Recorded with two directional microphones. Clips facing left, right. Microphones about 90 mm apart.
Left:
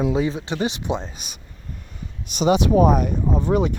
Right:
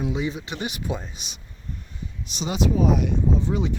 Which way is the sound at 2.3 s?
60° left (ahead or behind).